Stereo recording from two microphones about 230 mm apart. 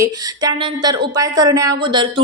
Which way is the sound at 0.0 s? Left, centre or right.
Centre.